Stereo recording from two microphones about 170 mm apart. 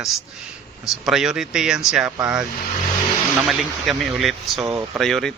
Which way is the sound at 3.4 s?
Centre (ahead or behind).